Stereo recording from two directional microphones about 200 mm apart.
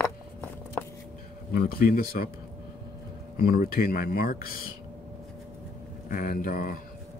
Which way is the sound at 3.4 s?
50° left (ahead or behind).